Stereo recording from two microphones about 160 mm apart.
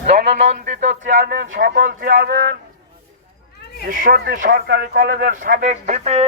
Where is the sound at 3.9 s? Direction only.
55° right (ahead or behind).